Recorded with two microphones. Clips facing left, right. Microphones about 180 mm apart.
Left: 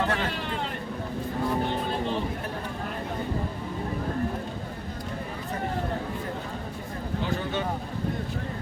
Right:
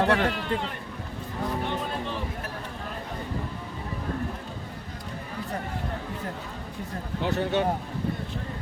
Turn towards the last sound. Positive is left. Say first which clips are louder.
# right 4 dB
turn(degrees=-70)  # may be behind; listen again after turning